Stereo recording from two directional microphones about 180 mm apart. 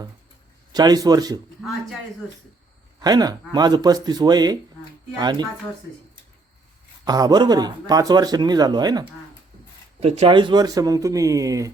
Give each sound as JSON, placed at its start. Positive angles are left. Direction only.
{"t": 0.7, "sound": "a man's voice", "side_deg": -20}
{"t": 3.0, "sound": "a man's voice", "side_deg": -20}
{"t": 7.0, "sound": "a man's voice", "side_deg": -20}
{"t": 10.0, "sound": "a man's voice", "side_deg": -35}